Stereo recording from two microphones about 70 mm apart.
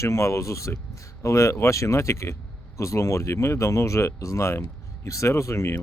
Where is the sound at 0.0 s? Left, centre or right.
Left.